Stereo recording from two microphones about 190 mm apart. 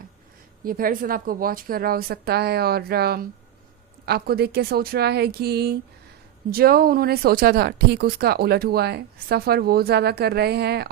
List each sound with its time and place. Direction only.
0.6 s a woman's voice: 50° right (ahead or behind)